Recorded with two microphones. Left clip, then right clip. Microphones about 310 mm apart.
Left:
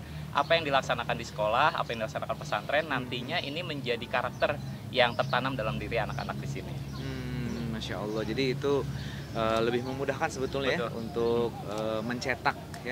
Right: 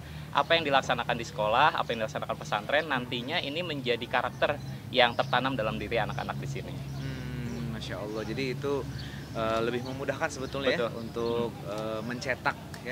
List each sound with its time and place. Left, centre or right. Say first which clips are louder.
0.3 s speech: right 1 dB; right
7.9 s speech: left 2 dB; left